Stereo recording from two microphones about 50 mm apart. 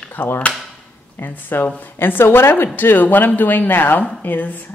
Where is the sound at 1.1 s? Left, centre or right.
Left.